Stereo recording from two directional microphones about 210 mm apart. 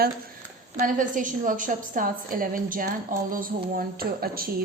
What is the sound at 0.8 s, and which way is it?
A woman's voice, 40° right (ahead or behind).